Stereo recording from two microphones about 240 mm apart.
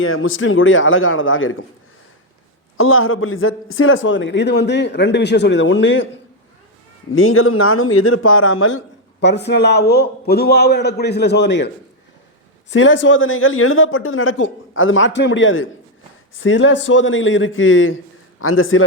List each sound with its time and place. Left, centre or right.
0.0 s speech: left
2.7 s a man's voice: left
7.1 s speech: left
9.2 s a man's voice: left
12.7 s a man's voice: left